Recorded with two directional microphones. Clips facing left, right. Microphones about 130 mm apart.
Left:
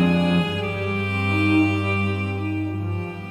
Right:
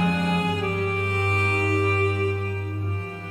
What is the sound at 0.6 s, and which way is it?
Music, 40° right (ahead or behind).